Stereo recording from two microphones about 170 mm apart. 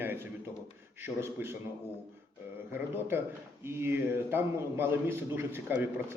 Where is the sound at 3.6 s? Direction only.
15° right (ahead or behind).